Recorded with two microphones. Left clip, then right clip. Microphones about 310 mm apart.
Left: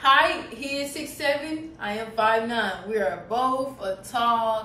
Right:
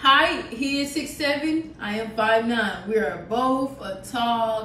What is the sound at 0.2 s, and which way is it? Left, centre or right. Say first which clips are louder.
A woman's voice: right 1 dB; centre.